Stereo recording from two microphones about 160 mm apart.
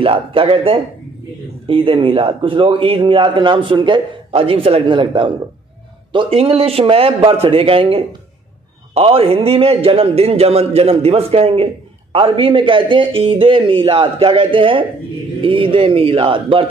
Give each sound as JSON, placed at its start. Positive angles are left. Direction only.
{"t": 0.0, "sound": "a man's voice", "side_deg": -35}